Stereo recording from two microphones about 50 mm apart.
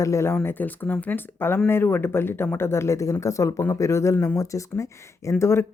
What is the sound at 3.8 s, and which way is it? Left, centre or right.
Speech, left.